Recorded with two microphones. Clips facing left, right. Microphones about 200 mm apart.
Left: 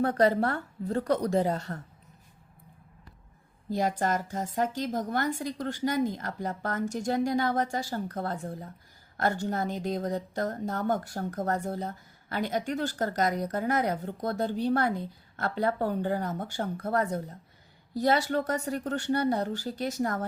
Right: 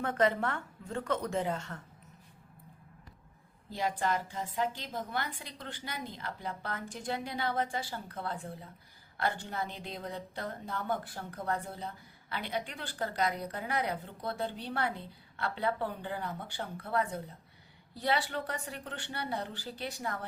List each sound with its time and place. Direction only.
0.0 s a woman's voice: 35° left (ahead or behind)
3.7 s speech: 45° left (ahead or behind)